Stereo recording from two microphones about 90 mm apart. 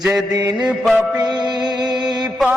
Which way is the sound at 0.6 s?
5° right (ahead or behind).